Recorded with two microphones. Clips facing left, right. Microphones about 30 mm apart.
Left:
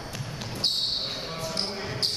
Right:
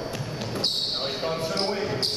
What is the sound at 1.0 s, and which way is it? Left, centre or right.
Basketball bounce, centre.